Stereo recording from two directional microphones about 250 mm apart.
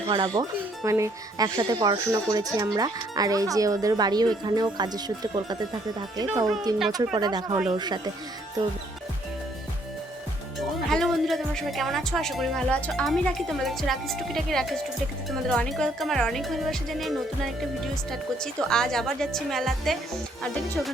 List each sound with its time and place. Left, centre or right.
0.1 s speech: centre
7.2 s speech: centre
10.8 s speech: centre